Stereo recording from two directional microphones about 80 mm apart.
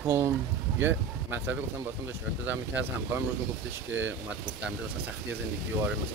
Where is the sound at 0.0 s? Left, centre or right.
Right.